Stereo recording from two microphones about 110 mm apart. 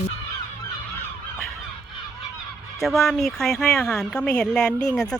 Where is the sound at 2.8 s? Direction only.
Centre (ahead or behind).